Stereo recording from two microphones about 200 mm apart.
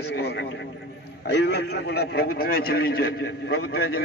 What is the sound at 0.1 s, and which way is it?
A man's voice, 55° left (ahead or behind).